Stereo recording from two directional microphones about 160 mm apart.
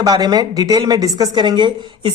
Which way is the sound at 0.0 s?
25° right (ahead or behind).